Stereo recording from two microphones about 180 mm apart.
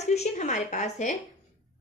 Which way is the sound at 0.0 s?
40° left (ahead or behind).